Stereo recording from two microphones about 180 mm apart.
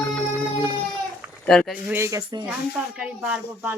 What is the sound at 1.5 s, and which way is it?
Speech, 5° left (ahead or behind).